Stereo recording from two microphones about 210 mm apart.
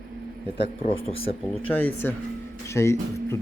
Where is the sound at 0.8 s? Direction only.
25° left (ahead or behind).